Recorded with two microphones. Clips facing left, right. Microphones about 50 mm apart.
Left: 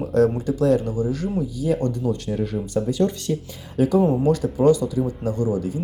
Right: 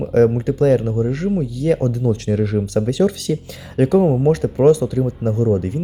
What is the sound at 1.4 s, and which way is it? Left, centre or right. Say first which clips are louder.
Speech: right 3 dB; right.